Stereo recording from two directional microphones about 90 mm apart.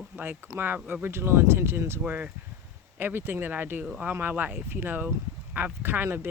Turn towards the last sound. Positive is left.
turn(degrees=-25)  # may be behind; listen again after turning